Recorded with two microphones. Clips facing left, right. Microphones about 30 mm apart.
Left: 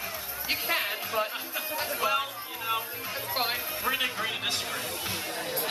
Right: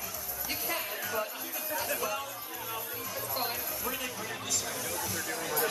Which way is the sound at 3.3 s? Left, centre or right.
Left.